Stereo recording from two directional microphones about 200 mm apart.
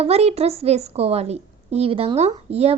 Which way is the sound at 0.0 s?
30° right (ahead or behind).